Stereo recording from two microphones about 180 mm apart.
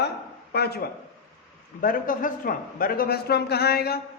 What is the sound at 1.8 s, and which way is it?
A man's voice, 50° left (ahead or behind).